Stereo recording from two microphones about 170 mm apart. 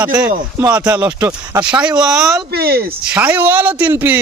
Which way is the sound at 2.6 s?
65° right (ahead or behind).